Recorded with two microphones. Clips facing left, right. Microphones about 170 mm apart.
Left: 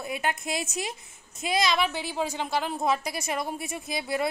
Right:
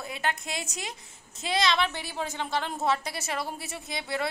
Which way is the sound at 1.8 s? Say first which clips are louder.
Left 3 dB; 15° left (ahead or behind).